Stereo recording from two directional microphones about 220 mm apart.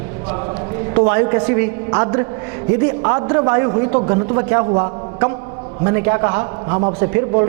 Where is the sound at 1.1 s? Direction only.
20° right (ahead or behind).